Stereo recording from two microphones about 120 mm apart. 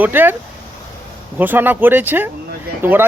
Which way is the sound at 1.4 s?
15° right (ahead or behind).